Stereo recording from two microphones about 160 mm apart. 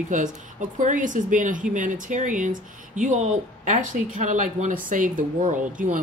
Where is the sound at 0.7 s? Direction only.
55° right (ahead or behind).